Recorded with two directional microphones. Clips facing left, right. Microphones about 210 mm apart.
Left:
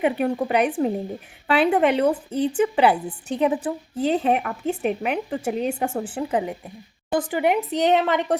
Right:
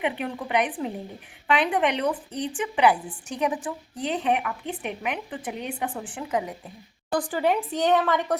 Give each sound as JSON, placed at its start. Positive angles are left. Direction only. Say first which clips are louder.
{"t": 0.0, "sound": "a woman's voice", "louder": "left 7 dB", "side_deg": 40}